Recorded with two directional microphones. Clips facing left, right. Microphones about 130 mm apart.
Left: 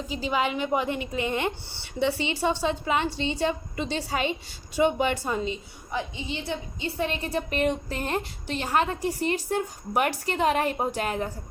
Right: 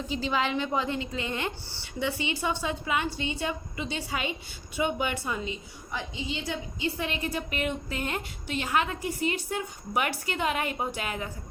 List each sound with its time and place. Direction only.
0.3 s a woman's voice: 15° left (ahead or behind); by 11.3 s 40° left (ahead or behind)